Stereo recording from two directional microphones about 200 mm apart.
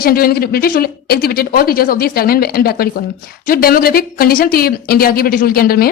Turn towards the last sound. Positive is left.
turn(degrees=50)  # may be behind; listen again after turning